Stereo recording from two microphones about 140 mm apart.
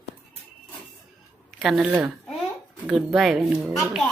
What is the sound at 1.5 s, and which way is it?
A woman's voice, centre (ahead or behind).